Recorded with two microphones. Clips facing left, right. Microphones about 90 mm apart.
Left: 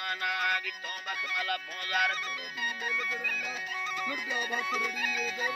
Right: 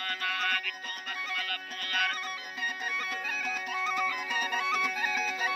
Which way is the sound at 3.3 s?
55° right (ahead or behind).